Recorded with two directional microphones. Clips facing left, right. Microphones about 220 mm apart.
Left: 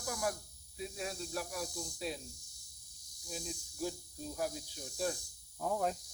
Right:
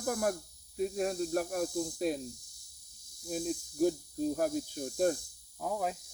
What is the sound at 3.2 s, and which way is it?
Speech, 50° right (ahead or behind).